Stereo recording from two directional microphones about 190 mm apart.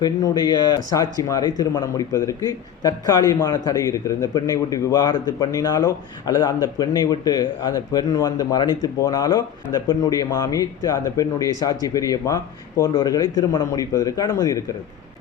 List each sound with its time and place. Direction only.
0.0 s speech: 20° left (ahead or behind)